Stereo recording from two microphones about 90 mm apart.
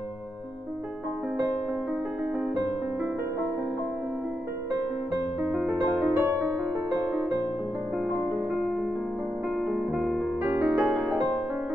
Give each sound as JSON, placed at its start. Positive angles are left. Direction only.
{"t": 5.5, "sound": "music", "side_deg": 0}
{"t": 5.9, "sound": "music", "side_deg": 10}
{"t": 6.1, "sound": "music", "side_deg": -25}
{"t": 9.7, "sound": "music", "side_deg": -10}